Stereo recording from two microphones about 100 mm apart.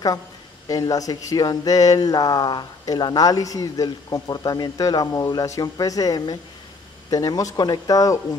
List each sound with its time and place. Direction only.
0.7 s speech: 40° left (ahead or behind)